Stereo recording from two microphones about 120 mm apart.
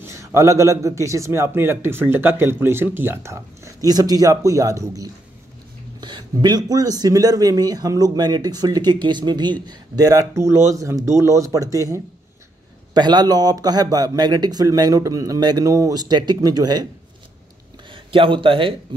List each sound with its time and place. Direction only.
0.0 s a man's voice: 25° right (ahead or behind)
17.9 s a man's voice: 45° right (ahead or behind)